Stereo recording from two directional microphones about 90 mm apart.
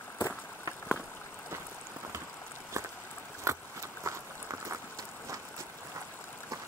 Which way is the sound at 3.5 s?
35° right (ahead or behind).